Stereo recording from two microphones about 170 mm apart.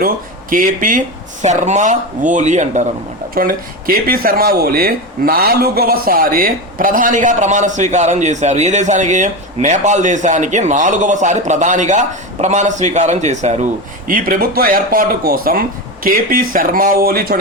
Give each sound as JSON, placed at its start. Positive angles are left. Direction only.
{"t": 0.5, "sound": "speech", "side_deg": -55}
{"t": 3.3, "sound": "speech", "side_deg": -60}
{"t": 14.1, "sound": "speech", "side_deg": -60}